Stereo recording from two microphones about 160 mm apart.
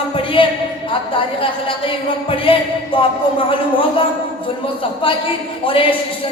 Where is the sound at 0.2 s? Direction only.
35° left (ahead or behind).